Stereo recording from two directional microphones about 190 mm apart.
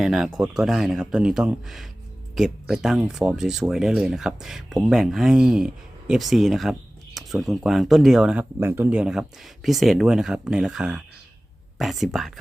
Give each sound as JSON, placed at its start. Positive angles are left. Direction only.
{"t": 0.0, "sound": "speech", "side_deg": 0}